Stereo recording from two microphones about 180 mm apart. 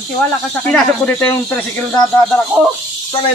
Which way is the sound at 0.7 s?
10° left (ahead or behind).